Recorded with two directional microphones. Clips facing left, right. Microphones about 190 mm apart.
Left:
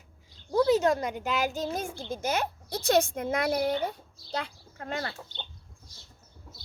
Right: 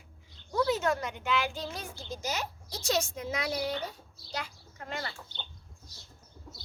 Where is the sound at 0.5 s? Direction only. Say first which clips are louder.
Left 5 dB; 35° left (ahead or behind).